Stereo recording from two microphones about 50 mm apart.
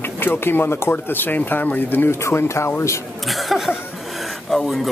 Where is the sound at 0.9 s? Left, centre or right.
Left.